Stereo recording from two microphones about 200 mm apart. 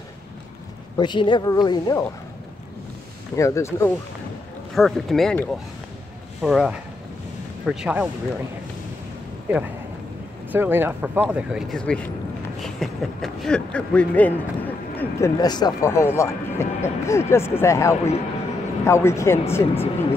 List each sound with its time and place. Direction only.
0.9 s a woman's voice: 25° left (ahead or behind)
3.3 s speech: 15° left (ahead or behind)
4.7 s speech: centre (ahead or behind)
9.5 s speech: 5° right (ahead or behind); by 19.4 s 15° left (ahead or behind)
19.7 s a woman's voice: 30° left (ahead or behind)